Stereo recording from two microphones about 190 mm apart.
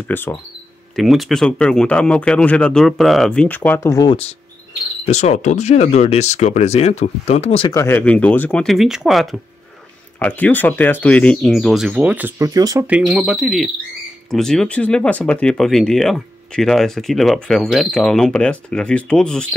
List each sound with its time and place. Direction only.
0.1 s speech: 10° left (ahead or behind)
0.9 s speech: centre (ahead or behind); by 4.2 s 20° left (ahead or behind)
5.0 s speech: 35° left (ahead or behind)
7.8 s speech: 10° left (ahead or behind); by 12.9 s 20° right (ahead or behind)
12.9 s speech: 5° right (ahead or behind)